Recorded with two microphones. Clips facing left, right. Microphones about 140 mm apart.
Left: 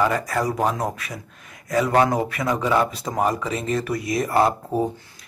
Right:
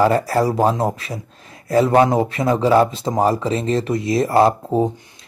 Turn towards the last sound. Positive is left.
turn(degrees=-20)  # may be behind; listen again after turning